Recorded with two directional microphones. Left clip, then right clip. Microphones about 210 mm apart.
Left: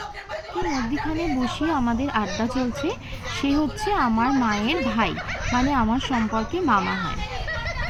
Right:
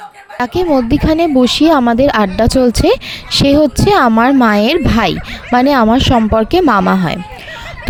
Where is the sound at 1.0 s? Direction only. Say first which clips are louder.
Right 15 dB; 50° right (ahead or behind).